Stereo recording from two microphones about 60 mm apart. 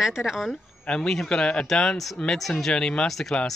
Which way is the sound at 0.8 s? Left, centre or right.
Centre.